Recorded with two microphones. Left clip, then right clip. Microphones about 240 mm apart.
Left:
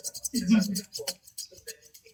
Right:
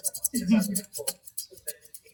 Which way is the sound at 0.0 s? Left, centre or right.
Centre.